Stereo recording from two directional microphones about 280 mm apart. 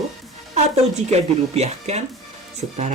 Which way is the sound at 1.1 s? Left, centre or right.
Right.